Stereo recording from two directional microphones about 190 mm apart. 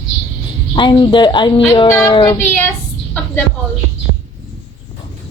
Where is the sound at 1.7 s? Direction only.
15° left (ahead or behind).